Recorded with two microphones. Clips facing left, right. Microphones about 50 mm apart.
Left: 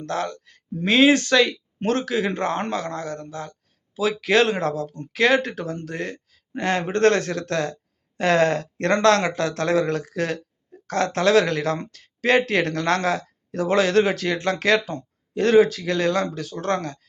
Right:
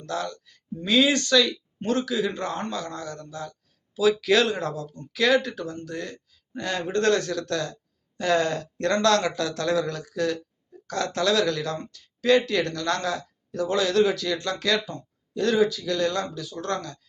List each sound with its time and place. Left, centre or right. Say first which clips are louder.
0.0 s speech: left 4 dB; left
1.8 s speech: left 3 dB; left
4.5 s speech: left 5 dB; left
5.5 s speech: left 3 dB; left
8.2 s speech: left 4 dB; left
8.9 s speech: left 4 dB; left
12.4 s speech: left 4 dB; left